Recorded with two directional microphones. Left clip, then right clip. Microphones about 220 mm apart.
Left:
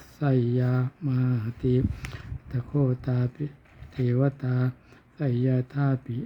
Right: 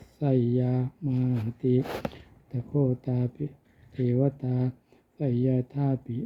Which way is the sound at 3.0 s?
15° left (ahead or behind).